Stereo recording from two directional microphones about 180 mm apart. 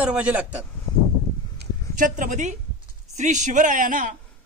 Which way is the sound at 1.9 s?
45° right (ahead or behind).